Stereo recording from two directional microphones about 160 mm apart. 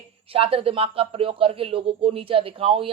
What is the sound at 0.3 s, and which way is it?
Speech, 35° right (ahead or behind).